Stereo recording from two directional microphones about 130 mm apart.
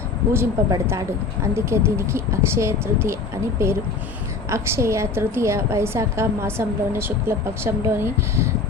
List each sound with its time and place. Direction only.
0.3 s a woman's voice: 20° right (ahead or behind)